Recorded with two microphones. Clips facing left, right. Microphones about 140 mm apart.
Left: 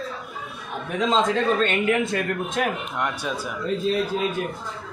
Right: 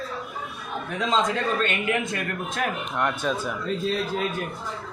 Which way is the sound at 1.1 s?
30° left (ahead or behind).